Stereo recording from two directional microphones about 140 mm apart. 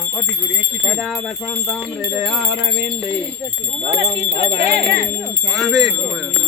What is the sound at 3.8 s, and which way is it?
Speech, 40° right (ahead or behind).